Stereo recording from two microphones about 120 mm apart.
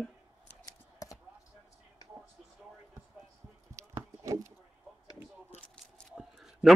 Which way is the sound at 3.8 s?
25° right (ahead or behind).